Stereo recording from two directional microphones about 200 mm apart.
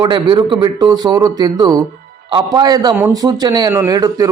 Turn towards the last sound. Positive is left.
turn(degrees=-20)  # may be behind; listen again after turning